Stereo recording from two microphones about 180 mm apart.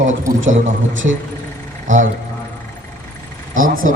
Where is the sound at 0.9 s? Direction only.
90° right.